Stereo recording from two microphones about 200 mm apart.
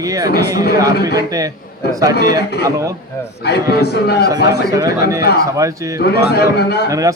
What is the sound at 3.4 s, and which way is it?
Speech, 55° left (ahead or behind).